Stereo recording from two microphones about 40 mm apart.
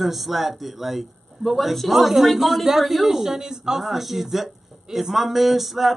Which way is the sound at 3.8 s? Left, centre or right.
Centre.